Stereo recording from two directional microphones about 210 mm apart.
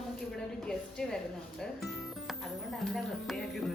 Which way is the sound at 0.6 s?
5° left (ahead or behind).